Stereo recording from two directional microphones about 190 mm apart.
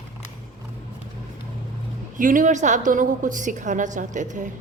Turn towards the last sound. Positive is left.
turn(degrees=-40)  # may be behind; listen again after turning